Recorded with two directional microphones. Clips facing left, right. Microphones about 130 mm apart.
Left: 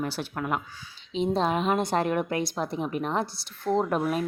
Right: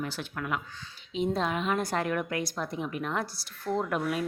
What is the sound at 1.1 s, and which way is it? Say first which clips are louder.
A woman's voice: left 4 dB; 30° left (ahead or behind).